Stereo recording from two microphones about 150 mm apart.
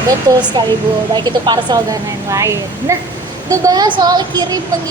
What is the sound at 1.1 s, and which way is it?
A woman's voice, 30° right (ahead or behind).